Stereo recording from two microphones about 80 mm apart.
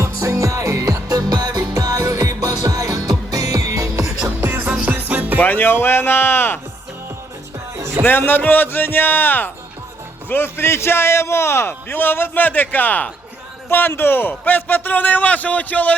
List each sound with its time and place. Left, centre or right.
0.0 s music: right
4.4 s music: right
5.4 s speech: left
8.0 s a man's voice: left